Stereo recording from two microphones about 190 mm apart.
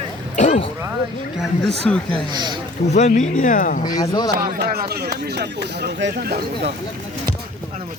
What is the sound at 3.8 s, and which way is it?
Speech, 20° left (ahead or behind).